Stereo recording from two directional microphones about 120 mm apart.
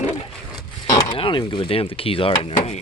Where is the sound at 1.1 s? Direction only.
45° left (ahead or behind).